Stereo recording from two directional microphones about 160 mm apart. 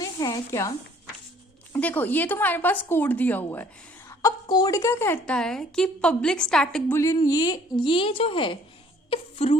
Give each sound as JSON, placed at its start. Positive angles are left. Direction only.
{"t": 0.0, "sound": "a sound", "side_deg": 20}
{"t": 1.7, "sound": "a woman's voice", "side_deg": 10}
{"t": 6.9, "sound": "speech", "side_deg": 20}
{"t": 9.0, "sound": "wail", "side_deg": 40}